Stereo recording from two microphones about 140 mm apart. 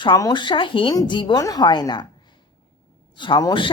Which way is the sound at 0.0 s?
30° left (ahead or behind).